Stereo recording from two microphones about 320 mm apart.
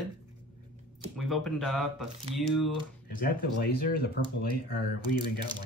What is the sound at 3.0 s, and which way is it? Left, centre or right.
Speech, left.